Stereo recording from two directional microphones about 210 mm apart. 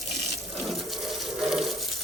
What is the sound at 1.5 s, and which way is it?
Water tap, centre (ahead or behind).